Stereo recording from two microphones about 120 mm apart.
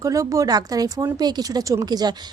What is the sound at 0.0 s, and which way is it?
Speech, 30° right (ahead or behind).